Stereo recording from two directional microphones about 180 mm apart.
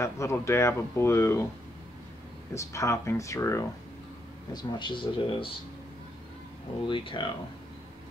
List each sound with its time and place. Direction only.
0.0 s speech: 15° left (ahead or behind)
2.5 s speech: 15° left (ahead or behind)
6.9 s speech: 30° left (ahead or behind)